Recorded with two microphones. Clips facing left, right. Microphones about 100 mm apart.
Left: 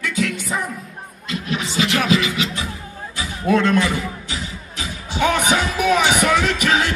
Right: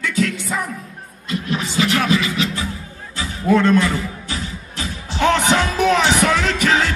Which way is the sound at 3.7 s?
15° left (ahead or behind).